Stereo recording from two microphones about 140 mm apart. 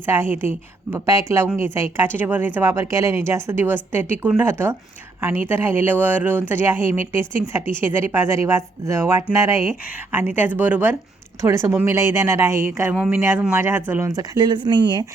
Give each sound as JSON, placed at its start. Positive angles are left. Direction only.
{"t": 0.0, "sound": "a woman's voice", "side_deg": -15}
{"t": 14.2, "sound": "speech", "side_deg": -30}